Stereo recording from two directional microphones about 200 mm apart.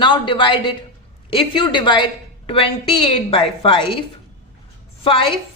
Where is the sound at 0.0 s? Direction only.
25° left (ahead or behind).